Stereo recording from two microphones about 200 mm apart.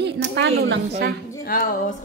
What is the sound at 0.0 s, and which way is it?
A woman's voice, 60° right (ahead or behind).